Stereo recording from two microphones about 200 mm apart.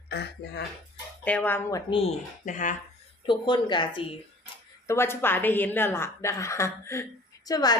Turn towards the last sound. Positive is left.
turn(degrees=20)  # may be behind; listen again after turning